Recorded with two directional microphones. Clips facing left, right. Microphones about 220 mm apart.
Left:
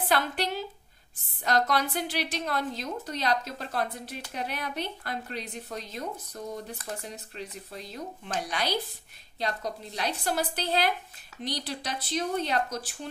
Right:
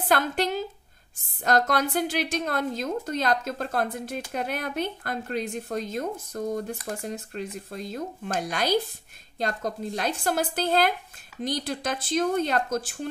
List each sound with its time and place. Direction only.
0.1 s a woman's voice: 50° right (ahead or behind)